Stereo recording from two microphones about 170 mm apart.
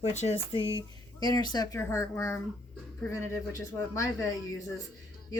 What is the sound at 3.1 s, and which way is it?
Speech, 15° left (ahead or behind).